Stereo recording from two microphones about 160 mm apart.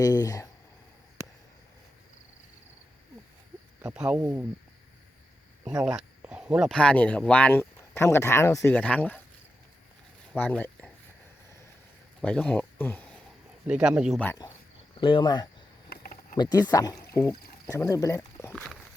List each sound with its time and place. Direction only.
0.0 s speech: 20° left (ahead or behind)
3.9 s speech: 5° right (ahead or behind)
5.8 s speech: 5° right (ahead or behind)
6.7 s speech: 5° left (ahead or behind)
10.3 s a sound: 10° left (ahead or behind)
12.2 s speech: 5° left (ahead or behind)
13.7 s speech: 5° right (ahead or behind)
15.0 s speech: 30° left (ahead or behind)
15.9 s a sound: 65° left (ahead or behind)
16.4 s speech: 25° left (ahead or behind)